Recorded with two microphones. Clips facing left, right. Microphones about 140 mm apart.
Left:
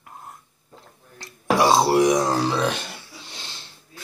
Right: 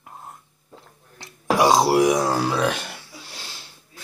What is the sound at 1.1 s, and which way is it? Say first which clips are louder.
Burping: even; 15° right (ahead or behind).